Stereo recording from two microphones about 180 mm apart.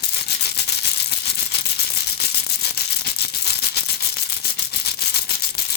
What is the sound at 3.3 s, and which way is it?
Rattle, 60° left (ahead or behind).